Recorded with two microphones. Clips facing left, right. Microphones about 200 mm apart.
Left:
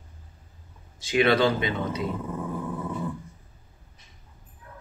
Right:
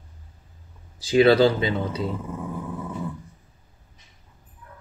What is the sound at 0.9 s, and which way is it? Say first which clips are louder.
Speech: right 5 dB; 35° right (ahead or behind).